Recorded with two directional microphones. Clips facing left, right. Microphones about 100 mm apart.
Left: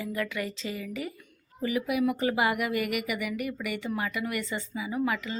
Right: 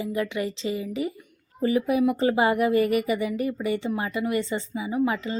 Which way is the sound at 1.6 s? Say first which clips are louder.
Right 5 dB; 35° right (ahead or behind).